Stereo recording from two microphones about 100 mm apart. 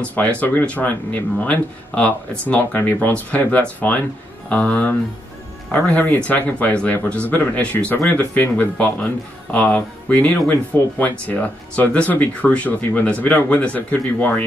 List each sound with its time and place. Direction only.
0.0 s speech: 15° left (ahead or behind)